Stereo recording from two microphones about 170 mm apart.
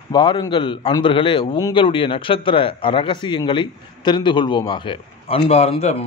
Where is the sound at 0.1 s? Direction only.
25° left (ahead or behind).